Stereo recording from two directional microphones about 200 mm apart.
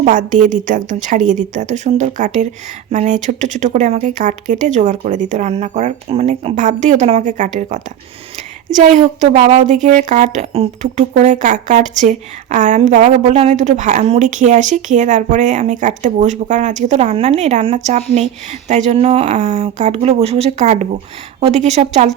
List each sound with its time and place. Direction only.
0.0 s speech: 40° right (ahead or behind)